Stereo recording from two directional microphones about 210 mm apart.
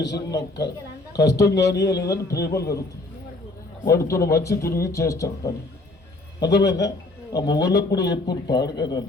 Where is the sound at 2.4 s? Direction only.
50° left (ahead or behind).